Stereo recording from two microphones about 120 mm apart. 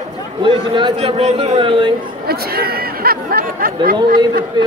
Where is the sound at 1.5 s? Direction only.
45° right (ahead or behind).